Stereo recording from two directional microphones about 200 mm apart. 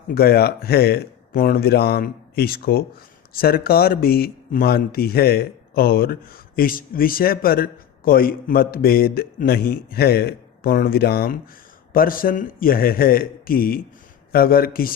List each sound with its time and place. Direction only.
0.1 s speech: 50° left (ahead or behind)